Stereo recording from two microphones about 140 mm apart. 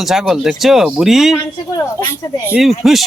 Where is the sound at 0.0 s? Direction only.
Centre (ahead or behind).